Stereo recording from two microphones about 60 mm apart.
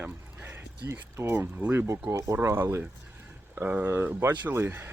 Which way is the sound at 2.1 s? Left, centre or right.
Right.